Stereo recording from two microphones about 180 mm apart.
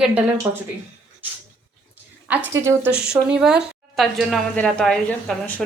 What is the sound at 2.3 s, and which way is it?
Speech, 10° right (ahead or behind).